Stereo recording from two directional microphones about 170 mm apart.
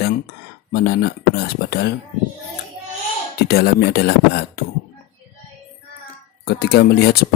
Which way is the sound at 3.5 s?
70° left (ahead or behind).